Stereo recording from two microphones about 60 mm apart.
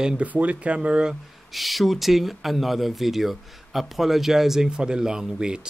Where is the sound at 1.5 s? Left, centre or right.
Centre.